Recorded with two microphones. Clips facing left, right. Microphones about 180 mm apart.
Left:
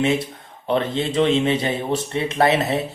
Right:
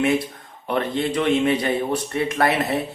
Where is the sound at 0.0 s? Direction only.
25° left (ahead or behind).